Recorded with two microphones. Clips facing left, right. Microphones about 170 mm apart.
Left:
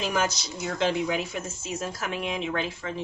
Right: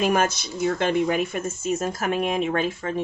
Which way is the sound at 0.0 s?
55° right (ahead or behind).